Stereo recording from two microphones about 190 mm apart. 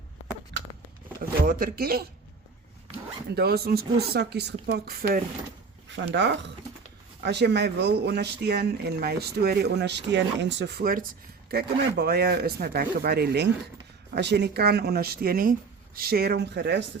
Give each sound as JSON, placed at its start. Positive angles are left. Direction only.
{"t": 1.5, "sound": "speech", "side_deg": -50}
{"t": 3.3, "sound": "speech", "side_deg": -55}
{"t": 6.1, "sound": "speech", "side_deg": -65}